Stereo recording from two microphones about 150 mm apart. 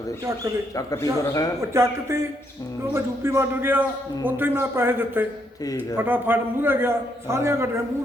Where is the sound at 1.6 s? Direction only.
20° right (ahead or behind).